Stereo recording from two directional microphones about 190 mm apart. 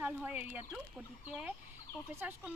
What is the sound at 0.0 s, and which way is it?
Speech, 10° right (ahead or behind).